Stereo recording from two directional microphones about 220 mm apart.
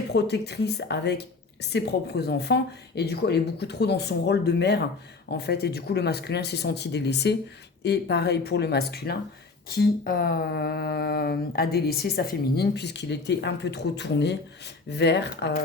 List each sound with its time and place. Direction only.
0.1 s speech: 50° left (ahead or behind)